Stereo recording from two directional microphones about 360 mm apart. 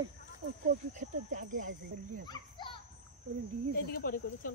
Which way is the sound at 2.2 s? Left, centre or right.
Centre.